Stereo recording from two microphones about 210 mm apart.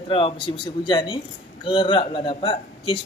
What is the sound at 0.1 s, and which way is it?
Speech, 25° left (ahead or behind).